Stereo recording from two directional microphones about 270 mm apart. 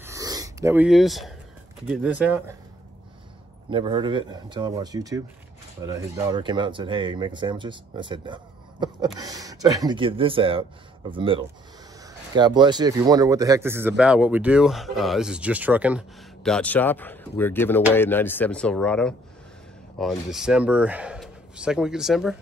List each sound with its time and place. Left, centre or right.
0.0 s a sound: centre
1.9 s speech: centre
3.7 s speech: centre